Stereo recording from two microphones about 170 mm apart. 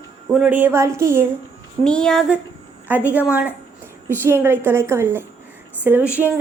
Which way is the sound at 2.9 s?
10° right (ahead or behind).